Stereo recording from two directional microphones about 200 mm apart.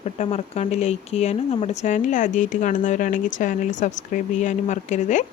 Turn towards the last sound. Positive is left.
turn(degrees=40)  # may be behind; listen again after turning